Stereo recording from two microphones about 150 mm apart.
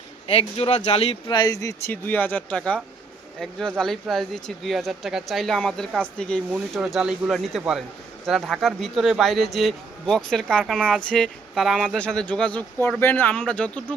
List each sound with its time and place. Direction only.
0.3 s speech: 40° left (ahead or behind)
1.3 s speech: 25° left (ahead or behind)
1.9 s speech: 10° left (ahead or behind)
6.5 s speech: 5° right (ahead or behind)